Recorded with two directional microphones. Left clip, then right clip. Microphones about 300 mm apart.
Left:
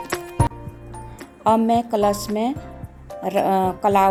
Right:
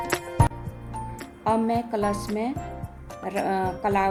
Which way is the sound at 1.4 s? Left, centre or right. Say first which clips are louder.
Left 6 dB; left.